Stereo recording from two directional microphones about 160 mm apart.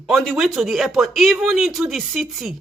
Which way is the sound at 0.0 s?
Centre (ahead or behind).